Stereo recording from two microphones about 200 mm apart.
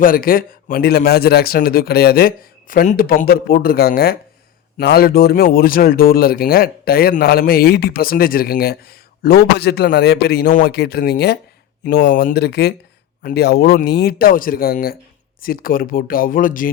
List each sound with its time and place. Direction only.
0.0 s a man's voice: 45° left (ahead or behind)